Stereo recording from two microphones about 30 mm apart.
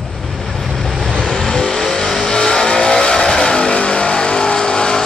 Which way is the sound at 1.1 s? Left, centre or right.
Left.